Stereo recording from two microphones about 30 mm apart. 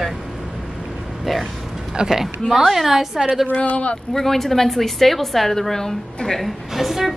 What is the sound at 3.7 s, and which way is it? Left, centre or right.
Speech, left.